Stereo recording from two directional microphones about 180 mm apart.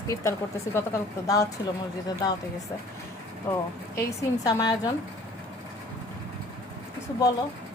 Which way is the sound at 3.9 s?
15° left (ahead or behind).